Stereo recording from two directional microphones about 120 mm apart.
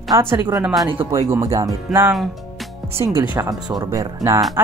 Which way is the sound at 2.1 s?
Centre (ahead or behind).